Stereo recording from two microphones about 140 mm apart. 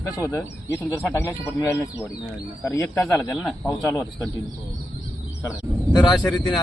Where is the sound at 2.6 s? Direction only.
20° left (ahead or behind).